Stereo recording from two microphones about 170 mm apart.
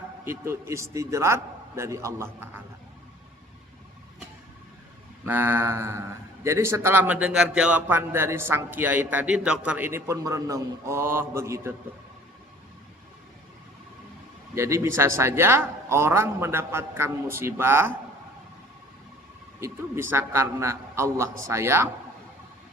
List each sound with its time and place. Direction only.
0.3 s a man's voice: 15° right (ahead or behind)
5.2 s a man's voice: 10° right (ahead or behind)
14.5 s a man's voice: 15° right (ahead or behind)
19.5 s a man's voice: 15° right (ahead or behind)